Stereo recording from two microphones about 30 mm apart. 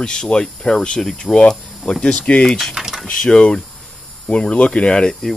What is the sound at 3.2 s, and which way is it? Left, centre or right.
Speech, left.